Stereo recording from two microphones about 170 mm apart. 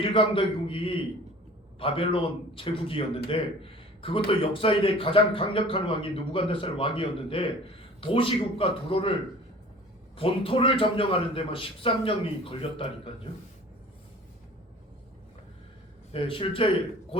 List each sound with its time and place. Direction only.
0.0 s a man's voice: 30° left (ahead or behind)
10.2 s a man's voice: 30° left (ahead or behind)
16.1 s a man's voice: 30° left (ahead or behind)